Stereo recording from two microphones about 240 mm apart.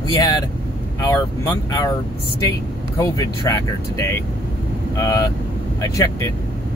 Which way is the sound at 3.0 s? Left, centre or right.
Centre.